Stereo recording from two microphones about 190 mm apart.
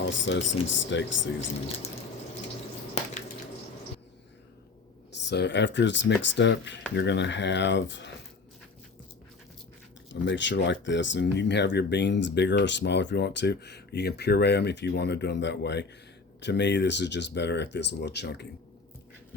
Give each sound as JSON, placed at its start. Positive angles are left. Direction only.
{"t": 0.1, "sound": "speech", "side_deg": 75}
{"t": 3.0, "sound": "a sound", "side_deg": 35}
{"t": 5.2, "sound": "speech", "side_deg": 65}
{"t": 10.1, "sound": "speech", "side_deg": 70}